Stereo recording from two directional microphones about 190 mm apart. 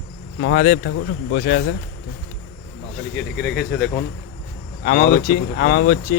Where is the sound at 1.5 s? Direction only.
65° left (ahead or behind).